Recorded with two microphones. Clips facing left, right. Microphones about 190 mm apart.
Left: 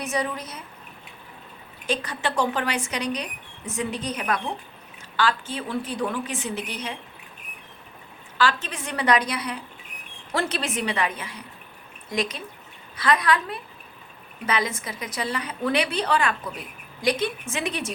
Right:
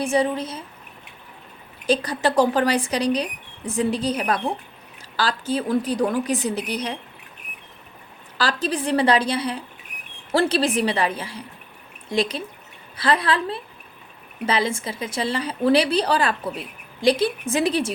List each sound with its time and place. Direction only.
0.0 s a woman's voice: 30° right (ahead or behind)
1.9 s a woman's voice: 35° right (ahead or behind)
8.4 s a woman's voice: 35° right (ahead or behind)